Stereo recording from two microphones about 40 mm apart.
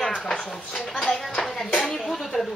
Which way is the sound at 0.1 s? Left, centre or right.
Centre.